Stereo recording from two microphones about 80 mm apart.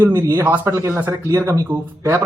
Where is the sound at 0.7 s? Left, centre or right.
Right.